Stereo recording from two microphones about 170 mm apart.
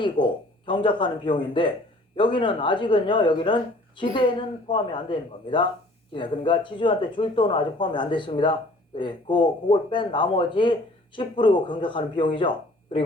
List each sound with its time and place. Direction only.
0.0 s a man's voice: 30° left (ahead or behind)